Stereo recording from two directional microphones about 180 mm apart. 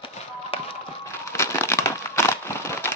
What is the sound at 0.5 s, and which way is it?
Music, 30° left (ahead or behind).